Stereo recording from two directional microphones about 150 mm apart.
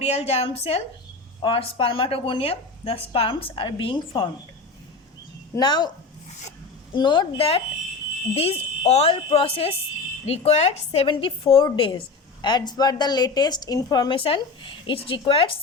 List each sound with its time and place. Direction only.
0.0 s a woman's voice: 45° left (ahead or behind)
5.5 s a woman's voice: 30° left (ahead or behind)
6.9 s a woman's voice: 30° left (ahead or behind)